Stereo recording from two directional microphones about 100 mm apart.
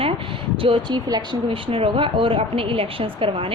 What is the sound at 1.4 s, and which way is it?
A woman's voice, 65° right (ahead or behind).